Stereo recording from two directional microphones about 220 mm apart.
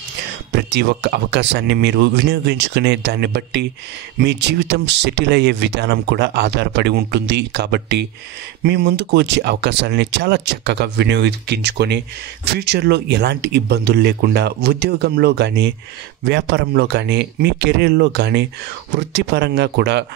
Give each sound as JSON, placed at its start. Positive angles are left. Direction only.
{"t": 0.7, "sound": "speech", "side_deg": -50}